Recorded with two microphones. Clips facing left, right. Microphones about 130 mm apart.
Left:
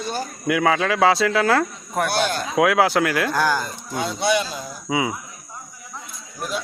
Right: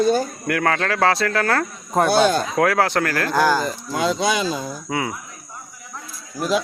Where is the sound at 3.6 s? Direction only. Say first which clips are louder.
Right 5 dB; 90° right.